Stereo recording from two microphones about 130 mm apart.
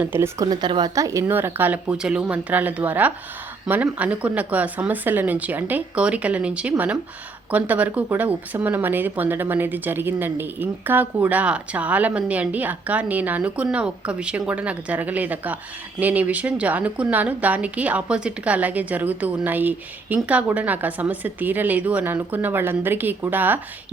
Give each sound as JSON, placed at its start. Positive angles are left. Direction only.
{"t": 0.0, "sound": "speech", "side_deg": -15}
{"t": 0.4, "sound": "speech", "side_deg": -35}